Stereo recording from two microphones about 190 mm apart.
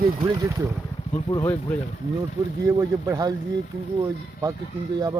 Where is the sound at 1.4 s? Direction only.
10° left (ahead or behind).